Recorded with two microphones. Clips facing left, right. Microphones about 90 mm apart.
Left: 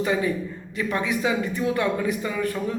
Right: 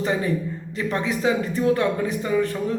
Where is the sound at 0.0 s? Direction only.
35° right (ahead or behind).